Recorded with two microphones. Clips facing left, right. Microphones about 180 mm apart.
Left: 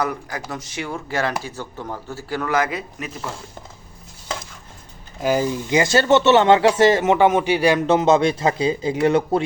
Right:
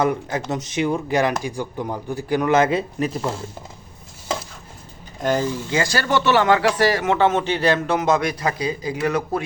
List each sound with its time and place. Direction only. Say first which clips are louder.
0.0 s speech: right 4 dB; 25° right (ahead or behind)
5.2 s speech: left 1 dB; 10° left (ahead or behind)
7.9 s speech: left 4 dB; 25° left (ahead or behind)